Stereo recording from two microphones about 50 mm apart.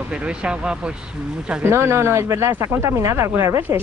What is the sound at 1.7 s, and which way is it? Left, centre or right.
Speech, right.